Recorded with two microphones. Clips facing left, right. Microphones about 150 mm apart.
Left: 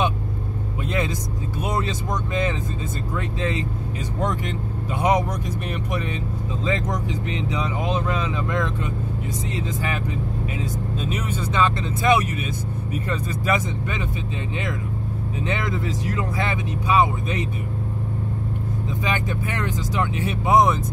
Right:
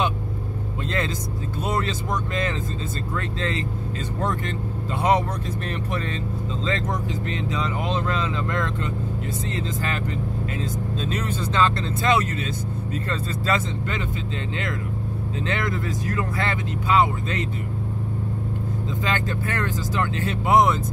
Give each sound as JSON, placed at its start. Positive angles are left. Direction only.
{"t": 0.8, "sound": "speech", "side_deg": 15}
{"t": 19.0, "sound": "speech", "side_deg": 15}